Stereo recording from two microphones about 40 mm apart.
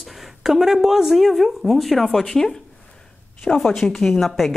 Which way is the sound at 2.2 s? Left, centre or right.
Centre.